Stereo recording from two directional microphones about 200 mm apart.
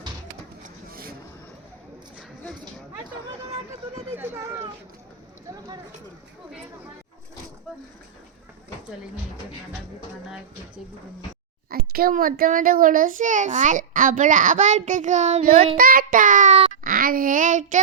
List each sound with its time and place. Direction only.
0.6 s vehicle: 45° right (ahead or behind)
11.9 s a child's voice: 50° right (ahead or behind); by 15.8 s 30° right (ahead or behind)
15.8 s child singing: 45° right (ahead or behind)
16.8 s child singing: 45° right (ahead or behind)